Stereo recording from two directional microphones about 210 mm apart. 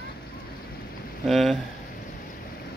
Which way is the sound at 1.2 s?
Centre (ahead or behind).